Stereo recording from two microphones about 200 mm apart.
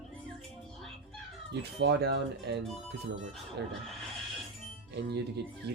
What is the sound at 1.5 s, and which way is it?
Speech, 55° right (ahead or behind).